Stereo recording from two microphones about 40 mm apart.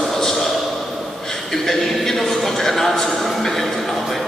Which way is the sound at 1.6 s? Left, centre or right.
Centre.